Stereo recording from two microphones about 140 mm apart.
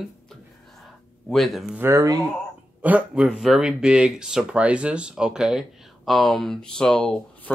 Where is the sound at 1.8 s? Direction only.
25° right (ahead or behind).